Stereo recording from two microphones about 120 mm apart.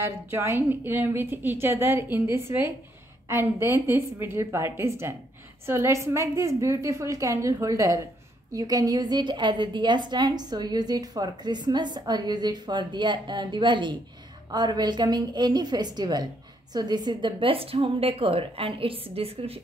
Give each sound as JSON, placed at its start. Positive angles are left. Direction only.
{"t": 0.0, "sound": "a woman's voice", "side_deg": -20}